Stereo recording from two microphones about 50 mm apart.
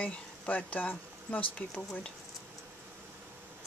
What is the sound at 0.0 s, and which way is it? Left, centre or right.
Speech, left.